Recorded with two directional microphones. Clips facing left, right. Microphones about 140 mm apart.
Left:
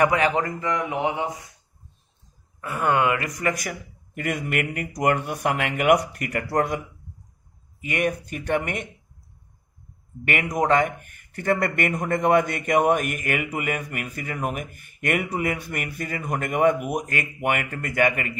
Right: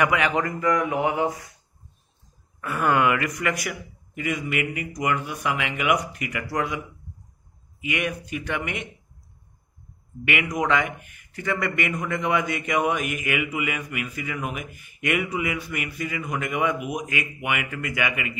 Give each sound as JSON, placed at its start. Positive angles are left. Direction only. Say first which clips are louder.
{"t": 0.0, "sound": "a man's voice", "louder": "left 2 dB", "side_deg": 35}
{"t": 2.6, "sound": "a man's voice", "louder": "even", "side_deg": 25}
{"t": 7.8, "sound": "a man's voice", "louder": "left 3 dB", "side_deg": 45}
{"t": 10.5, "sound": "a man's voice", "louder": "left 5 dB", "side_deg": 40}